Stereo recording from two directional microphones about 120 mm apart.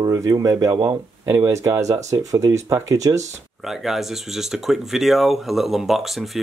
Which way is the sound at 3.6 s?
Centre (ahead or behind).